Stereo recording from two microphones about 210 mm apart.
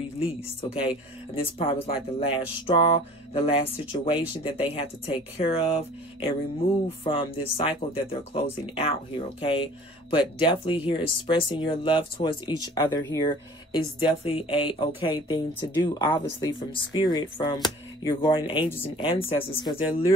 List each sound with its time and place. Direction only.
0.8 s speech: 25° left (ahead or behind)
7.1 s speech: 25° left (ahead or behind)